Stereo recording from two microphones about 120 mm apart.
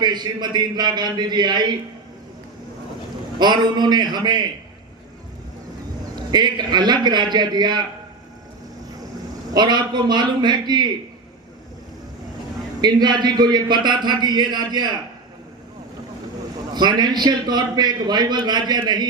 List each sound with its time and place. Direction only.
0.0 s a man's voice: 35° right (ahead or behind)
3.3 s a man's voice: 35° right (ahead or behind)
6.3 s a man's voice: 35° right (ahead or behind)
9.5 s a man's voice: 35° right (ahead or behind)
12.8 s a man's voice: 35° right (ahead or behind)
16.7 s a man's voice: 35° right (ahead or behind)